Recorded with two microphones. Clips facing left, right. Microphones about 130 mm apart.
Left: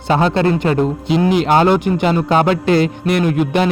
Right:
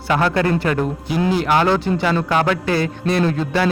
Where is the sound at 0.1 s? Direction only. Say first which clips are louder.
Left 3 dB; 25° left (ahead or behind).